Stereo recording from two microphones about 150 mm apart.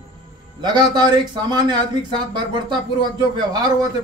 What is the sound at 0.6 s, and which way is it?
Speech, 30° right (ahead or behind).